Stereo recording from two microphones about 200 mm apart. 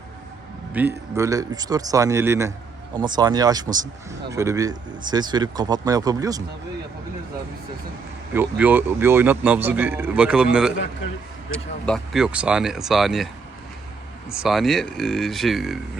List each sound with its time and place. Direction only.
0.7 s a man's voice: 10° right (ahead or behind)
8.3 s a man's voice: 10° right (ahead or behind)
14.3 s speech: centre (ahead or behind)